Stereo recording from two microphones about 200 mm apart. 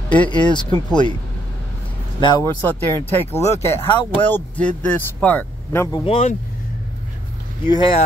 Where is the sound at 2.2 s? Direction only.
25° left (ahead or behind).